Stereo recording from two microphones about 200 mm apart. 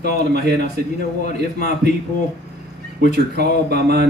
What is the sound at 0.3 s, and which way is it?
Speech, 55° right (ahead or behind).